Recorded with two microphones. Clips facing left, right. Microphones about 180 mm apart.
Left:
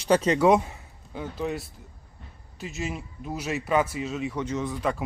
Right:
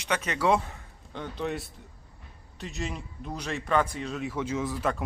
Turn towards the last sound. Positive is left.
turn(degrees=0)  # may be behind; listen again after turning